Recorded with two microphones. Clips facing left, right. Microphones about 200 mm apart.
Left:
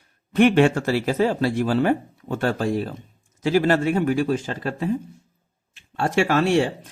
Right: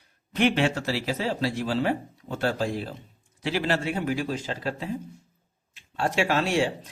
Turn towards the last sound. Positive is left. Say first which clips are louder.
# left 5 dB
turn(degrees=55)  # may be behind; listen again after turning